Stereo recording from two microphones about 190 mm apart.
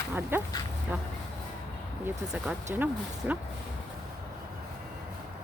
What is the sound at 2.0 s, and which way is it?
Speech, 5° right (ahead or behind).